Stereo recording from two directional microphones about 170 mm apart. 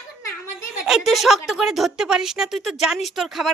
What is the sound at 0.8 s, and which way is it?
A woman's voice, centre (ahead or behind).